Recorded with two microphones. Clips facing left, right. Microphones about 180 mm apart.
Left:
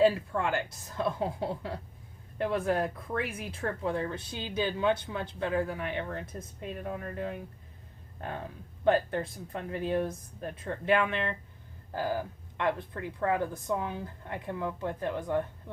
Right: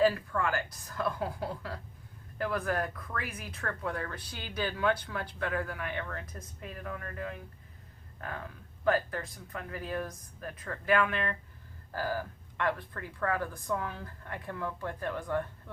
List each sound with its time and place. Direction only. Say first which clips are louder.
0.0 s speech: left 2 dB; 25° left (ahead or behind)